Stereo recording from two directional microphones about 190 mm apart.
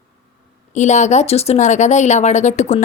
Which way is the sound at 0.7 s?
40° left (ahead or behind).